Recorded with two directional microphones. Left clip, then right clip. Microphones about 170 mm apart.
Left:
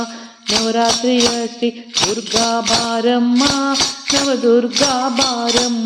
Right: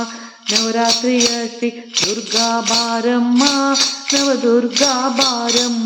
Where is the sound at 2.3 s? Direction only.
25° left (ahead or behind).